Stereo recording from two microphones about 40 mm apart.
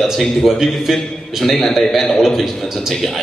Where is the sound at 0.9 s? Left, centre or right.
Centre.